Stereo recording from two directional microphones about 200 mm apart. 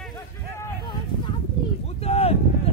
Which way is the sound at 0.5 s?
20° left (ahead or behind).